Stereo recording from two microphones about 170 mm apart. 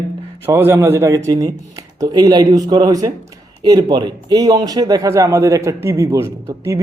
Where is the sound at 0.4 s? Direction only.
15° right (ahead or behind).